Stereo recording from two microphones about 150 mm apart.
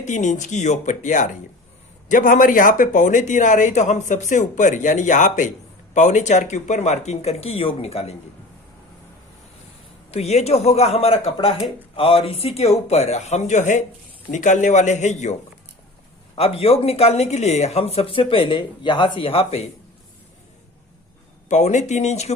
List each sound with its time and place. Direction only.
0.0 s speech: 55° left (ahead or behind)
10.1 s speech: 45° left (ahead or behind)
21.5 s speech: 50° left (ahead or behind)